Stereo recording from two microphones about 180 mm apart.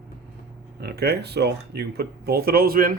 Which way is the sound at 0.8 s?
65° right (ahead or behind).